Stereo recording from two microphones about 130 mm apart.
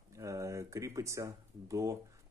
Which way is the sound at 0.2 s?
25° right (ahead or behind).